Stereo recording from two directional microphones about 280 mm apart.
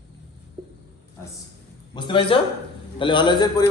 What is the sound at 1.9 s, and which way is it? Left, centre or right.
A man's voice, centre.